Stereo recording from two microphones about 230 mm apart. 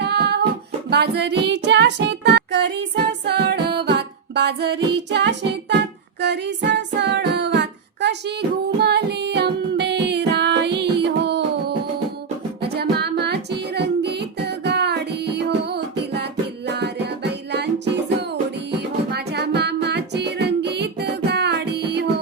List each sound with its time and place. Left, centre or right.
0.0 s singing: right
0.9 s music: right
6.2 s singing: right
12.6 s music: right
19.1 s music: right